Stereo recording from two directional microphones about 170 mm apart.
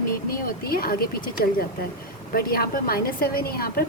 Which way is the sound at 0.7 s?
60° left (ahead or behind).